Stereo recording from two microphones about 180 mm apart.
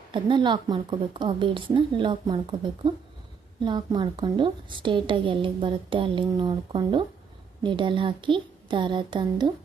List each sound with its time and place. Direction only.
0.1 s a woman's voice: 25° right (ahead or behind)